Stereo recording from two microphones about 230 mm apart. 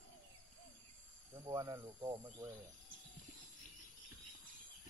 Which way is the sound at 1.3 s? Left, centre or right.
Centre.